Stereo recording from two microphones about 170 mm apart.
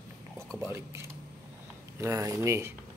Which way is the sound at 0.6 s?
15° right (ahead or behind).